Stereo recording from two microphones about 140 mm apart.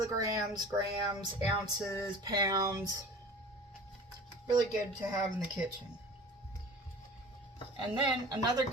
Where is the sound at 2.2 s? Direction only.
25° right (ahead or behind).